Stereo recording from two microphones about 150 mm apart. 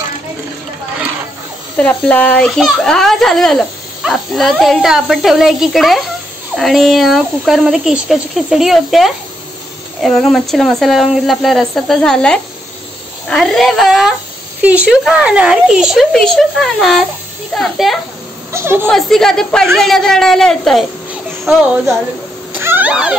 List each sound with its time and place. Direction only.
1.8 s a child's voice: 10° left (ahead or behind)
18.5 s speech: 15° right (ahead or behind)
18.9 s a child's voice: centre (ahead or behind)
22.5 s cat: 15° right (ahead or behind)